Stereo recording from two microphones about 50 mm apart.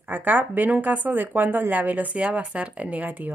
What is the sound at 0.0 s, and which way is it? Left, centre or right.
Speech, right.